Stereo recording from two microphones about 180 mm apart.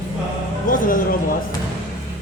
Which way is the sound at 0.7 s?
50° left (ahead or behind).